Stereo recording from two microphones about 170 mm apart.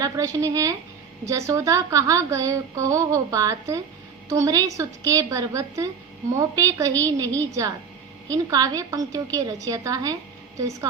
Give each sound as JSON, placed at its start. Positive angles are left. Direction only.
{"t": 0.0, "sound": "a woman's voice", "side_deg": -20}